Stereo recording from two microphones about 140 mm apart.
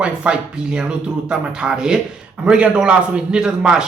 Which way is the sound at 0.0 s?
5° right (ahead or behind).